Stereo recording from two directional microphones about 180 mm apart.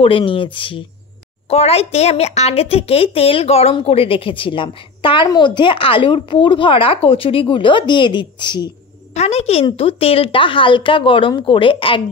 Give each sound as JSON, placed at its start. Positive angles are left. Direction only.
{"t": 0.0, "sound": "a woman's voice", "side_deg": 30}
{"t": 9.1, "sound": "a woman's voice", "side_deg": 35}